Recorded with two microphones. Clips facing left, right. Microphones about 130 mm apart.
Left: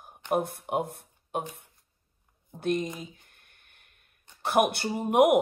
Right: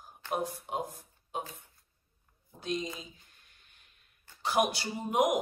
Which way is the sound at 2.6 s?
55° left (ahead or behind).